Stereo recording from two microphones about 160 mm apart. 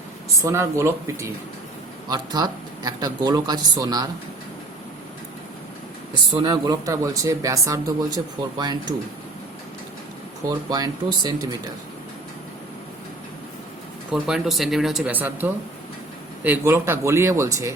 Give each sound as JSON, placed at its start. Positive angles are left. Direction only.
{"t": 0.4, "sound": "speech", "side_deg": -15}
{"t": 6.3, "sound": "speech", "side_deg": -25}
{"t": 10.7, "sound": "speech", "side_deg": -25}
{"t": 14.1, "sound": "speech", "side_deg": -5}